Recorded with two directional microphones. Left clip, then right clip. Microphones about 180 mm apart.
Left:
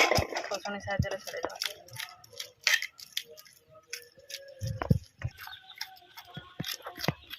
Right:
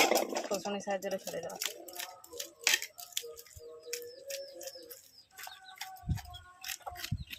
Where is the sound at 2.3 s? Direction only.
15° right (ahead or behind).